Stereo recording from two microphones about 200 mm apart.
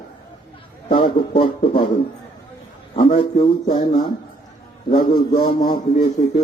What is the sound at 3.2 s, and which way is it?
Speech, 30° left (ahead or behind).